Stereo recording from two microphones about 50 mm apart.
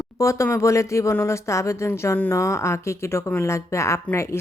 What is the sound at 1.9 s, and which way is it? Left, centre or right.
A woman's voice, left.